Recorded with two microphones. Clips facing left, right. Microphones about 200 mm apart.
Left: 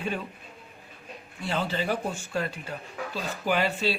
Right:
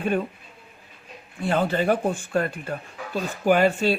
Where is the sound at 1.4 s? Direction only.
50° right (ahead or behind).